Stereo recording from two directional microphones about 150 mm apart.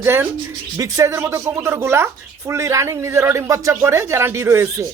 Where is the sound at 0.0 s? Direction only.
15° right (ahead or behind).